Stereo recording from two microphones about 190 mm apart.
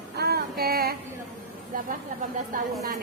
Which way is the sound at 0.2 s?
55° right (ahead or behind).